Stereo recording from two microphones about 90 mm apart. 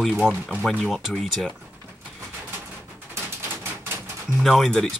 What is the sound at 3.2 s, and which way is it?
Typewriter, 25° right (ahead or behind).